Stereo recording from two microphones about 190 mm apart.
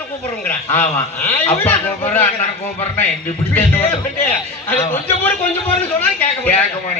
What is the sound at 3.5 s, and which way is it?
Speech, 10° left (ahead or behind).